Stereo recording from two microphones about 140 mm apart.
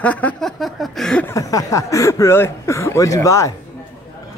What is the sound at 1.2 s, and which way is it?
Speech, 25° left (ahead or behind).